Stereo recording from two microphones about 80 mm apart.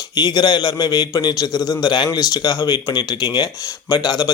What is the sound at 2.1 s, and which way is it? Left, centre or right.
A man's voice, left.